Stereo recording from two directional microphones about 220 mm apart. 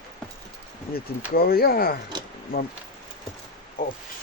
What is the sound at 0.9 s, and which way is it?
Speech, 45° left (ahead or behind).